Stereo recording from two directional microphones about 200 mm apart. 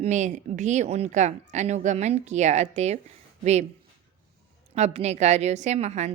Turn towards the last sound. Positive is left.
turn(degrees=-35)  # may be behind; listen again after turning